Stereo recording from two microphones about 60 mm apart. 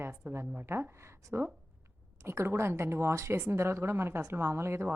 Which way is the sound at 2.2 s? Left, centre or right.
Right.